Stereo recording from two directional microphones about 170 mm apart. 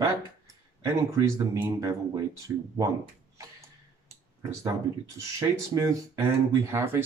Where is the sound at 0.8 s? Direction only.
15° right (ahead or behind).